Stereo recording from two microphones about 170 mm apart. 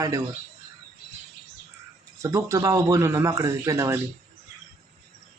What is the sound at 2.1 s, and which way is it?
A man's voice, 15° right (ahead or behind).